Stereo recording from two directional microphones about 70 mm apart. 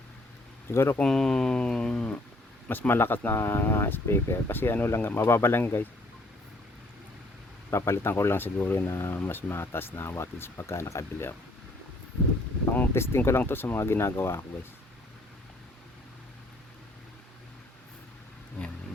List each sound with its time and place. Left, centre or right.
0.7 s speech: left
0.9 s speech: centre
2.6 s speech: left
7.7 s speech: left
12.9 s speech: left